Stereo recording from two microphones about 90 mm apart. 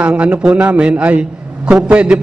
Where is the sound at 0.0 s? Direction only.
15° right (ahead or behind).